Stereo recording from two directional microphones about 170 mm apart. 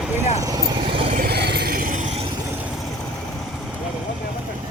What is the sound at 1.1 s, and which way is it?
Vehicle, 65° right (ahead or behind).